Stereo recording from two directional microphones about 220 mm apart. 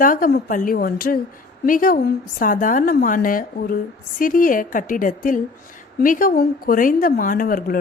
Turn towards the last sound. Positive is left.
turn(degrees=40)  # may be behind; listen again after turning